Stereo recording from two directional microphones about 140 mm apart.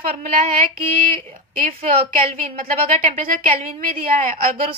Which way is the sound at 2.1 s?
75° right (ahead or behind).